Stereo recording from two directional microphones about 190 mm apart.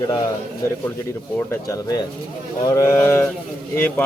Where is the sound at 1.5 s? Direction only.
15° left (ahead or behind).